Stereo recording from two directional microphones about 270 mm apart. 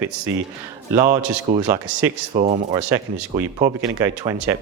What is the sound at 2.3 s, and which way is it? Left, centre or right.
Speech, right.